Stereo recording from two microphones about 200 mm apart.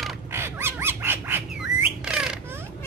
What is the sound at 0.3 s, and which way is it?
Bird, 10° right (ahead or behind).